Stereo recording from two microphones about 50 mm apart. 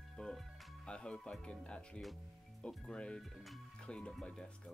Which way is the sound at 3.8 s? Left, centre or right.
Centre.